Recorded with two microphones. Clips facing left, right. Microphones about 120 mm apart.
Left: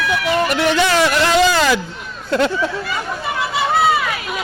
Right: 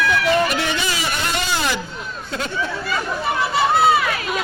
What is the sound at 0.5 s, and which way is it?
Speech, 70° left (ahead or behind).